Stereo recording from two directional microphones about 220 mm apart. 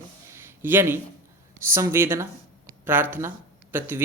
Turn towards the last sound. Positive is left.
turn(degrees=-10)  # may be behind; listen again after turning